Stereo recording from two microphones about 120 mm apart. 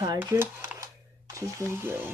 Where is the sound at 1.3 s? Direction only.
20° right (ahead or behind).